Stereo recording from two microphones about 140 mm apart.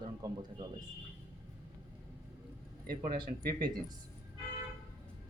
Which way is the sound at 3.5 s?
30° right (ahead or behind).